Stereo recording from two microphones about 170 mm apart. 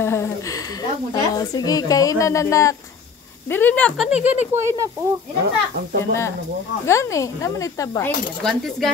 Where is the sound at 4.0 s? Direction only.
5° right (ahead or behind).